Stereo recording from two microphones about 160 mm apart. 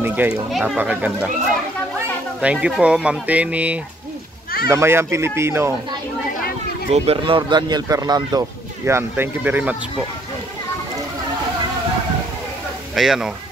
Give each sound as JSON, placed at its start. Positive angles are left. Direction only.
{"t": 0.0, "sound": "speech", "side_deg": -10}
{"t": 6.9, "sound": "speech", "side_deg": -35}
{"t": 12.9, "sound": "speech", "side_deg": 0}